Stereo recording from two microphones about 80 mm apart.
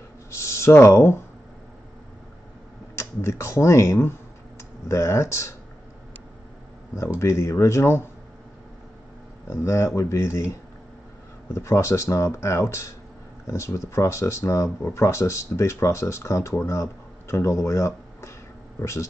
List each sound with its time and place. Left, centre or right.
0.3 s speech: left
3.0 s speech: left
7.2 s speech: left
9.5 s speech: left